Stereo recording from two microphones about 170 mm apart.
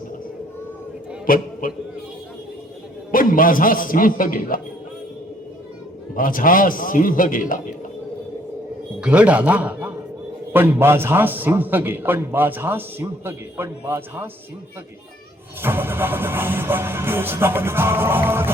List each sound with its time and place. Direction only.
1.3 s a man's voice: 55° left (ahead or behind)
3.1 s a man's voice: 55° left (ahead or behind)
6.1 s a man's voice: 55° left (ahead or behind)
9.0 s a man's voice: 5° right (ahead or behind)
15.6 s a man's voice: 15° right (ahead or behind)